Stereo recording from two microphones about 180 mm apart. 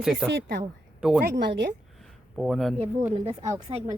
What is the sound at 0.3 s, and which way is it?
A woman's voice, 70° right (ahead or behind).